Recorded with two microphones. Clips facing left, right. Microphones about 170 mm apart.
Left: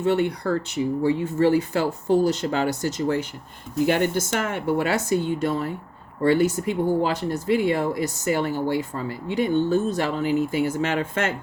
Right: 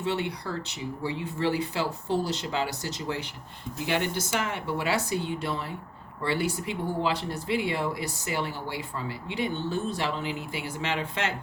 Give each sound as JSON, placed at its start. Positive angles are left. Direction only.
{"t": 0.0, "sound": "speech", "side_deg": 50}